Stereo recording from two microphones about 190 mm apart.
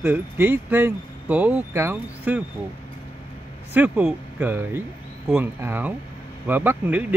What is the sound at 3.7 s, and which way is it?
Speech, 5° right (ahead or behind).